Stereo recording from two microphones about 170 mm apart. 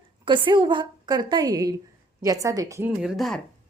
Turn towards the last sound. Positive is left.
turn(degrees=0)  # may be behind; listen again after turning